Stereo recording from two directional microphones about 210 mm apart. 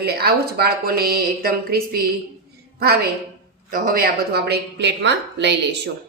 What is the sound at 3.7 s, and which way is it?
A woman's voice, 45° right (ahead or behind).